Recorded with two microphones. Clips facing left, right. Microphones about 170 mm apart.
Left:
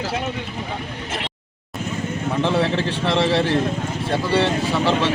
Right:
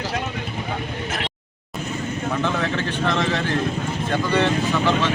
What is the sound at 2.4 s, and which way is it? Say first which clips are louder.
Speech: left 6 dB; 30° left (ahead or behind).